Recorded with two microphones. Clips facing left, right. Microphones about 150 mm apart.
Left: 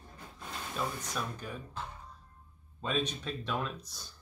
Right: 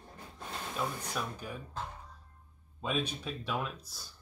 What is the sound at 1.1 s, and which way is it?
Speech, 10° right (ahead or behind).